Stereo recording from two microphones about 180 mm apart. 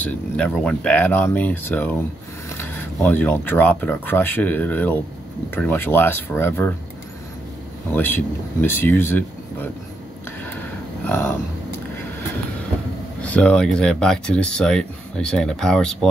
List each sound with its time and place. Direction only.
0.0 s speech: 5° left (ahead or behind)
7.9 s speech: 10° left (ahead or behind)
11.1 s speech: 10° left (ahead or behind)
13.2 s speech: 5° left (ahead or behind)